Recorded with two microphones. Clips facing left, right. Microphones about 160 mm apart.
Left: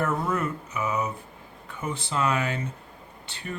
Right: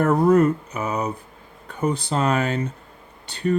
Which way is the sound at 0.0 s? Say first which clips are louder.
Right 10 dB; 40° right (ahead or behind).